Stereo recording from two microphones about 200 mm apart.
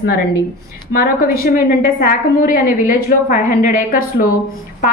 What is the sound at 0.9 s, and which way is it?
A woman's voice, 45° left (ahead or behind).